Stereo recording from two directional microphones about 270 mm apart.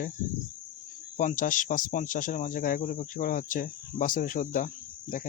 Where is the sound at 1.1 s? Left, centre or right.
Left.